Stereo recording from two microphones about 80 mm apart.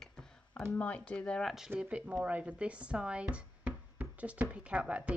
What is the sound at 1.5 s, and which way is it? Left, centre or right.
A woman's voice, centre.